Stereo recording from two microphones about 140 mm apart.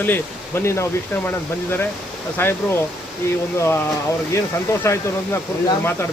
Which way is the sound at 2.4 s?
15° left (ahead or behind).